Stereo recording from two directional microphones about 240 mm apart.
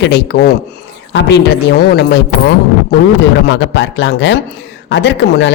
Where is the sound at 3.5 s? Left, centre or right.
Left.